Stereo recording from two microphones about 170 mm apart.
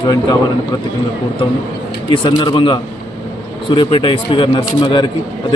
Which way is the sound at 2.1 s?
25° left (ahead or behind).